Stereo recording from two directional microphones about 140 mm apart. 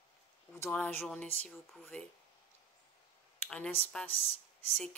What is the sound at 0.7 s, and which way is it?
Speech, 10° left (ahead or behind).